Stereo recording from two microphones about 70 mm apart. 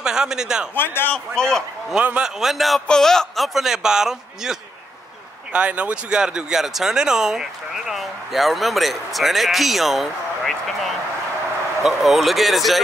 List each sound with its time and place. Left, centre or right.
0.0 s a man's voice: centre
0.7 s speech: left
1.1 s a man's voice: centre
2.0 s a man's voice: centre
5.5 s speech: centre